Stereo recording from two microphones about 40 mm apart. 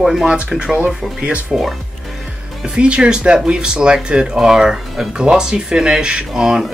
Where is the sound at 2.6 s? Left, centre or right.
Right.